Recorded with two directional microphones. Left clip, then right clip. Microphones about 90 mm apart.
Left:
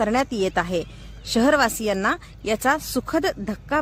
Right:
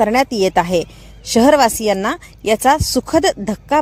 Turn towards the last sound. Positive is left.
turn(degrees=-45)  # may be behind; listen again after turning